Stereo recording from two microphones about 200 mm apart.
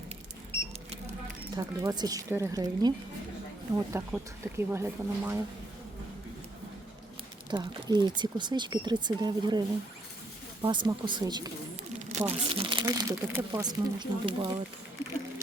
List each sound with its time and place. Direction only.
1.5 s speech: 20° right (ahead or behind)
7.5 s speech: 20° right (ahead or behind)
12.0 s speech: 35° right (ahead or behind)